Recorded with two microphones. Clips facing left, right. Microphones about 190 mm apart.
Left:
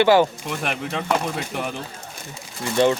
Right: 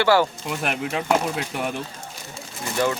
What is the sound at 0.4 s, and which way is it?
Speech, centre (ahead or behind).